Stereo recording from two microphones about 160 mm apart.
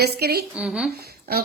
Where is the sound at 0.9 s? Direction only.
85° right.